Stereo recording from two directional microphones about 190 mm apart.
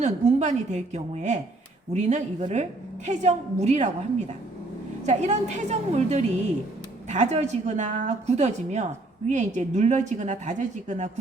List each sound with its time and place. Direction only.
0.0 s a woman's voice: 35° right (ahead or behind)